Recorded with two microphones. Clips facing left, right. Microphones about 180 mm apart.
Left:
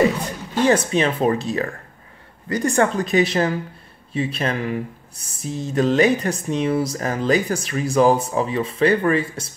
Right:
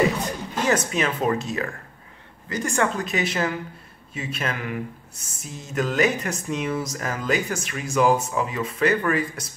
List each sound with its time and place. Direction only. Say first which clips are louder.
0.7 s speech: left 5 dB; 30° left (ahead or behind)